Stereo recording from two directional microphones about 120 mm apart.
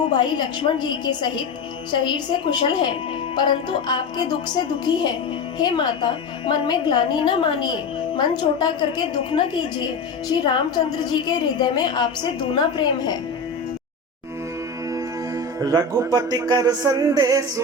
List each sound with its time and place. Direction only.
0.1 s a woman's voice: 40° left (ahead or behind)
15.6 s speech: 30° right (ahead or behind)